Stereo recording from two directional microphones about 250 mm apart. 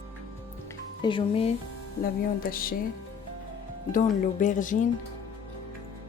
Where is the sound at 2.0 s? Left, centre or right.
Left.